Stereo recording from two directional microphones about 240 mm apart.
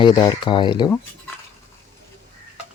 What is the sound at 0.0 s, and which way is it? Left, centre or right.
Speech, centre.